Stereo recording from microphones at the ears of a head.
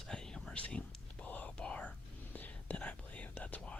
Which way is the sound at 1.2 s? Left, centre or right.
Left.